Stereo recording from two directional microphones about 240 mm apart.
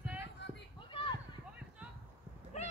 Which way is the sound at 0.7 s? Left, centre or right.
Left.